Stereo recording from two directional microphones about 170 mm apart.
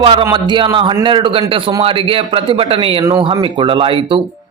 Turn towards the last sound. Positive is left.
turn(degrees=-30)  # may be behind; listen again after turning